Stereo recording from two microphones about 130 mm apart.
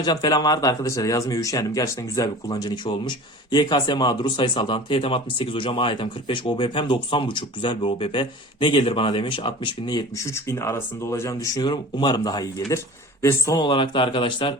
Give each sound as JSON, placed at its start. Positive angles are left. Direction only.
{"t": 0.0, "sound": "speech", "side_deg": 30}
{"t": 10.3, "sound": "speech", "side_deg": 20}
{"t": 13.6, "sound": "speech", "side_deg": 35}